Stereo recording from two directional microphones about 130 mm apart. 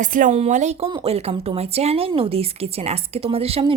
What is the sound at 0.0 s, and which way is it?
Speech, 85° right.